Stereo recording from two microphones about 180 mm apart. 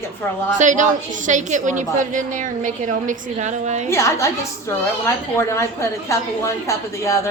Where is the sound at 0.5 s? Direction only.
45° right (ahead or behind).